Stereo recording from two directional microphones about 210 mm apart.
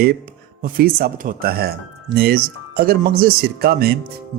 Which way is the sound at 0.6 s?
45° right (ahead or behind).